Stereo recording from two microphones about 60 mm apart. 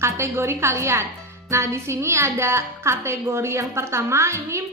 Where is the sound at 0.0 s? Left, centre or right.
Right.